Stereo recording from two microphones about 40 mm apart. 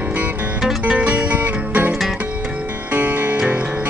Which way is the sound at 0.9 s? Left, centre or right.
Right.